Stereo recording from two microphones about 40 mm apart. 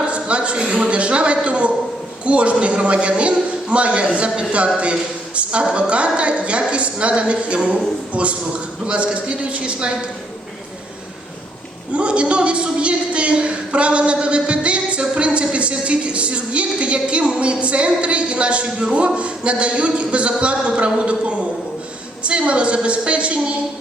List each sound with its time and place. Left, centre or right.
0.0 s a sound: right
0.9 s a man's voice: right
11.9 s a woman's voice: right